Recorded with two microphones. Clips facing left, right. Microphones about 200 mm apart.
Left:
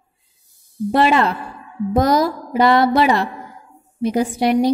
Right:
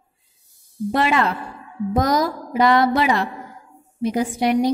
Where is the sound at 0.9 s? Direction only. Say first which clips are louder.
Left 4 dB; 30° left (ahead or behind).